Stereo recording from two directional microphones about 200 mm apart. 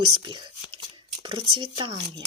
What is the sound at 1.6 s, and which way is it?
Speech, 25° right (ahead or behind).